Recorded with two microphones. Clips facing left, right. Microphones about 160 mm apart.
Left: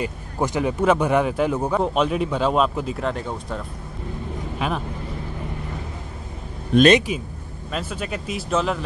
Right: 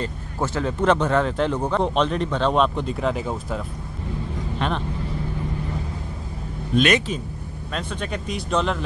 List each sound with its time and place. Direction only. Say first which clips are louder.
0.0 s speech: left 2 dB; 15° left (ahead or behind)
6.7 s a man's voice: left 5 dB; 75° left (ahead or behind)
7.1 s speech: left 1 dB; 10° left (ahead or behind)